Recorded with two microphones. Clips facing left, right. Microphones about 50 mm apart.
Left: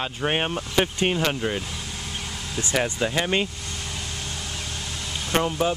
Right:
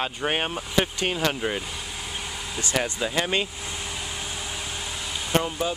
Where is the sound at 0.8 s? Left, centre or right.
Left.